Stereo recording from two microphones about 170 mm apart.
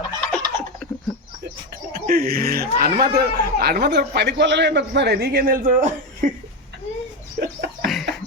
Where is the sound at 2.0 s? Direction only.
60° right (ahead or behind).